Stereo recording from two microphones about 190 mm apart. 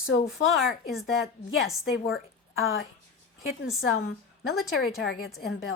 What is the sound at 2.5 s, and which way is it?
Speech, 90° left.